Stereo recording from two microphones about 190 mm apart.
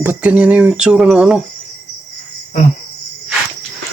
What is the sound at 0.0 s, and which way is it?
Speech, 10° right (ahead or behind).